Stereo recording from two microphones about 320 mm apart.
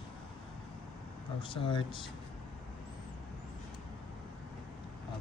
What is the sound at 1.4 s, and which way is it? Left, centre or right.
Speech, centre.